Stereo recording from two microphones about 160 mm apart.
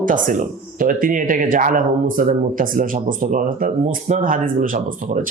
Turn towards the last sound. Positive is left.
turn(degrees=-55)  # may be behind; listen again after turning